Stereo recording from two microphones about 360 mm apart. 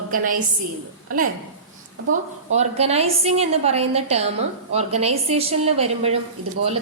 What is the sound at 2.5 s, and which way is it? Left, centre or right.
A woman's voice, centre.